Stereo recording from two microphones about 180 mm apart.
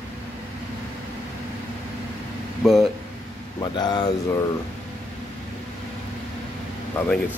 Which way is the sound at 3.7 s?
25° left (ahead or behind).